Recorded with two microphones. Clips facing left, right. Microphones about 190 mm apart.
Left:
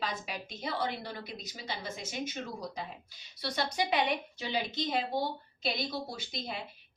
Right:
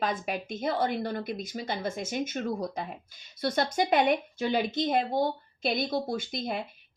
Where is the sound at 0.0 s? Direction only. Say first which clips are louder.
Right 7 dB; 55° right (ahead or behind).